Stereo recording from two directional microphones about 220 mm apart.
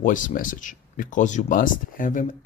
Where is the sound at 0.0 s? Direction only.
35° left (ahead or behind).